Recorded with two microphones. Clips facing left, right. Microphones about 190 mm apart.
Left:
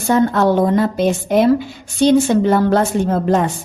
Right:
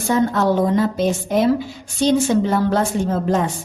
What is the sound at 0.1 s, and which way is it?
A woman's voice, 60° left (ahead or behind).